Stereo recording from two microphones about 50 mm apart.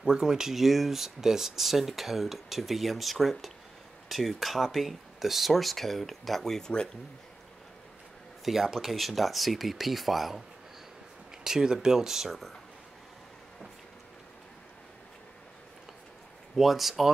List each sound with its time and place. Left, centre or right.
0.0 s speech: centre
8.5 s speech: centre
11.4 s speech: centre
16.5 s speech: centre